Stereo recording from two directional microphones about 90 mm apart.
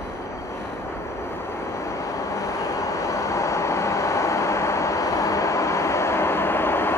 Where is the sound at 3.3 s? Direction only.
35° left (ahead or behind).